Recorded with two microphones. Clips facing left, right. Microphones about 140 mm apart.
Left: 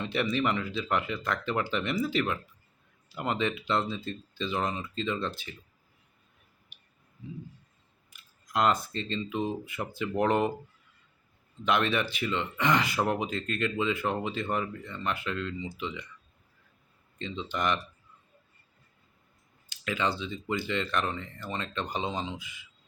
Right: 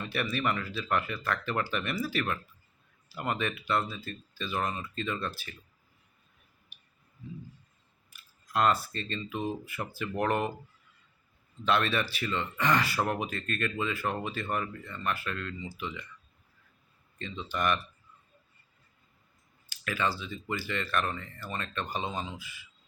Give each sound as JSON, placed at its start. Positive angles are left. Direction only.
{"t": 0.0, "sound": "speech", "side_deg": 20}
{"t": 8.1, "sound": "speech", "side_deg": 15}
{"t": 11.6, "sound": "speech", "side_deg": 15}
{"t": 17.2, "sound": "speech", "side_deg": 20}
{"t": 19.7, "sound": "speech", "side_deg": 20}